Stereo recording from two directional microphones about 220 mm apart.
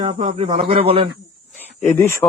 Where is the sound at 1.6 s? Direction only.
5° left (ahead or behind).